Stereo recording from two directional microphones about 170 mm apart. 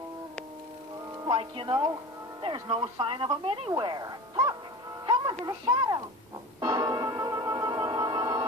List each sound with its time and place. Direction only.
1.7 s speech: 20° right (ahead or behind)
5.0 s music: 25° right (ahead or behind)
5.4 s speech: 20° right (ahead or behind)
6.6 s music: 20° right (ahead or behind)